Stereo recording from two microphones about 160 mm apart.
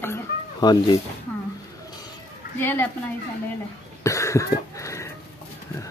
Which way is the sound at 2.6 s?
15° left (ahead or behind).